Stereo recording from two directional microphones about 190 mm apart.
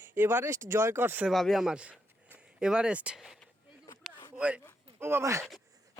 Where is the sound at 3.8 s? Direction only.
20° left (ahead or behind).